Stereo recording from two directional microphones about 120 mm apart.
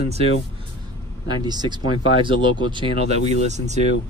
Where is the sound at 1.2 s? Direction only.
35° right (ahead or behind); by 3.7 s 75° right (ahead or behind).